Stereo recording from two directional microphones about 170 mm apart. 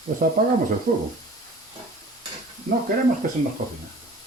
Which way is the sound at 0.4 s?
60° right (ahead or behind).